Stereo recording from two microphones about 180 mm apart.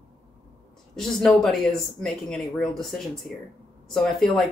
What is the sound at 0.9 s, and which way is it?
Speech, centre (ahead or behind).